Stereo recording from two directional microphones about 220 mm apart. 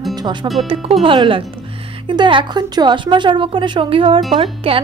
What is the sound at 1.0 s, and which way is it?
Speech, 20° right (ahead or behind).